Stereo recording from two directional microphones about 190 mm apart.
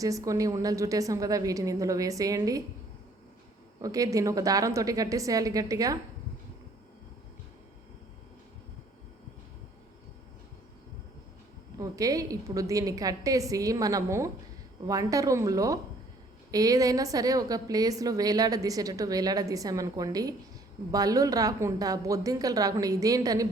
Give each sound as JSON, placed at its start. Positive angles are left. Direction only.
{"t": 0.0, "sound": "a woman's voice", "side_deg": -15}
{"t": 3.8, "sound": "a woman's voice", "side_deg": -15}
{"t": 11.8, "sound": "a woman's voice", "side_deg": -20}